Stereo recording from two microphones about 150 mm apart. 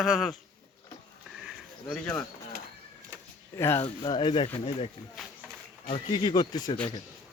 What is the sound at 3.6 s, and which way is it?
Speech, 15° left (ahead or behind).